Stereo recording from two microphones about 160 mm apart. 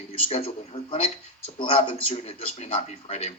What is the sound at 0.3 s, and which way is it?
Speech, 35° left (ahead or behind).